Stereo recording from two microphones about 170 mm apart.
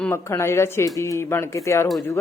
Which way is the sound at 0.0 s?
15° left (ahead or behind).